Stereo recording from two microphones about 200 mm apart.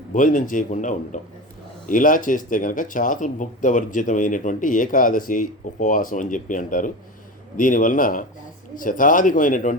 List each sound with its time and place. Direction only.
0.1 s speech: 40° left (ahead or behind)